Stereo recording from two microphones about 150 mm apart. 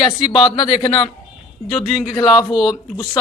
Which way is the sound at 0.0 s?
30° left (ahead or behind).